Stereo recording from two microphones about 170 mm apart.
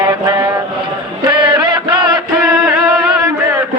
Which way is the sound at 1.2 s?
25° right (ahead or behind).